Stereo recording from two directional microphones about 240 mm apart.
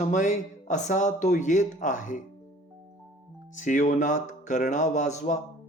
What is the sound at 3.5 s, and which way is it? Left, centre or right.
Speech, left.